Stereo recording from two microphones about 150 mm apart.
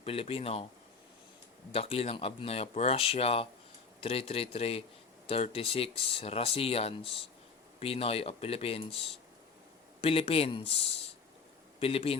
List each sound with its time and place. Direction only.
0.0 s speech: 40° left (ahead or behind)
1.7 s speech: 40° left (ahead or behind)